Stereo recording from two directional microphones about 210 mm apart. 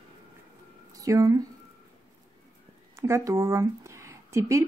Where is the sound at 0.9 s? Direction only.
15° right (ahead or behind).